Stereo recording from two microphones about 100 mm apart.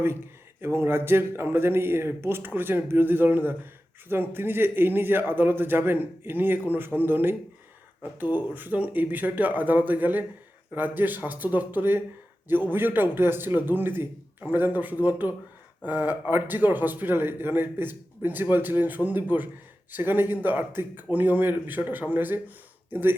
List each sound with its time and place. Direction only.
0.6 s a man's voice: 25° right (ahead or behind)
8.5 s a man's voice: 15° right (ahead or behind)